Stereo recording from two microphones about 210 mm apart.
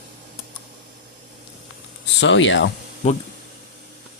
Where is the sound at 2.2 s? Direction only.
60° left (ahead or behind).